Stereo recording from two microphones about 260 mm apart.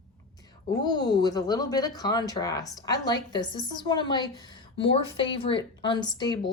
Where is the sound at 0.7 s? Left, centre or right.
Centre.